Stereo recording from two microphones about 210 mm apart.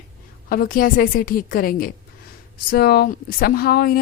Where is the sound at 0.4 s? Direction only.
45° left (ahead or behind).